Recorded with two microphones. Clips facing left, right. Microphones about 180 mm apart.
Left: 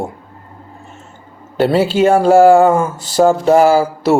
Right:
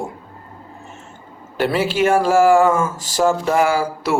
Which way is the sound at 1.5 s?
30° left (ahead or behind).